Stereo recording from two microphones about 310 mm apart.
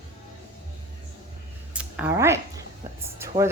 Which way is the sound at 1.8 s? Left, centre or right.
Centre.